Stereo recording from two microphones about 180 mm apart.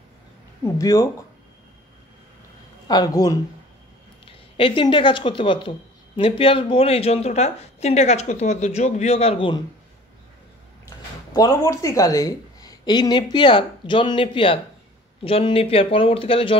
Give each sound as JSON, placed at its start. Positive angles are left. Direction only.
{"t": 0.7, "sound": "speech", "side_deg": 20}
{"t": 2.9, "sound": "speech", "side_deg": 20}
{"t": 4.6, "sound": "speech", "side_deg": 30}
{"t": 11.3, "sound": "speech", "side_deg": 20}